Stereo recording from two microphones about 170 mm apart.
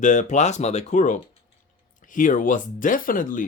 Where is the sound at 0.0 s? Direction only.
45° left (ahead or behind).